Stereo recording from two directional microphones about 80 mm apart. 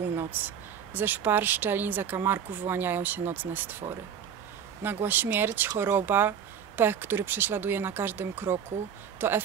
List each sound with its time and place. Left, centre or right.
0.0 s a sound: right
0.9 s speech: right
4.8 s speech: right